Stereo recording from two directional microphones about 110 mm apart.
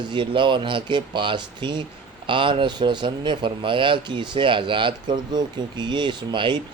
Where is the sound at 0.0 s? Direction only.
45° right (ahead or behind).